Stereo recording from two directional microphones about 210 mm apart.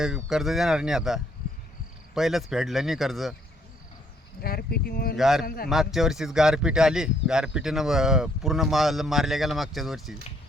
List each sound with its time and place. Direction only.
0.0 s speech: centre (ahead or behind)
4.4 s speech: 45° left (ahead or behind)
5.1 s speech: centre (ahead or behind)